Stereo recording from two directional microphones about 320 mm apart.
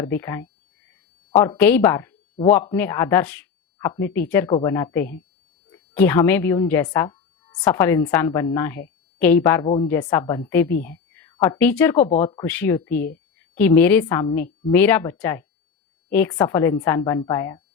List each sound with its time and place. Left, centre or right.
0.0 s speech: centre
11.9 s speech: centre